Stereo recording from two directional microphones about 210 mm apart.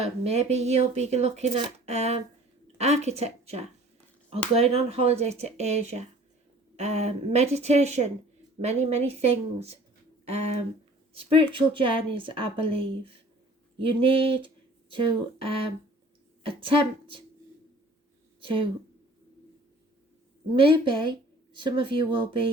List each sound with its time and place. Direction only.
0.0 s speech: 30° right (ahead or behind)
11.1 s a woman's voice: 25° right (ahead or behind)
18.3 s a woman's voice: 25° right (ahead or behind)
20.6 s a woman's voice: 25° right (ahead or behind)